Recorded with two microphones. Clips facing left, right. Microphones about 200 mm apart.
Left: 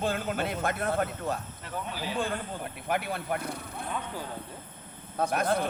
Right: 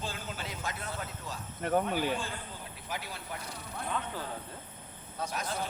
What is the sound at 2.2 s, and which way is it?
Speech, 60° left (ahead or behind).